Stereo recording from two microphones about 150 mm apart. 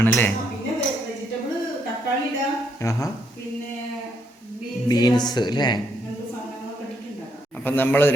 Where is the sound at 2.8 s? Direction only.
20° left (ahead or behind).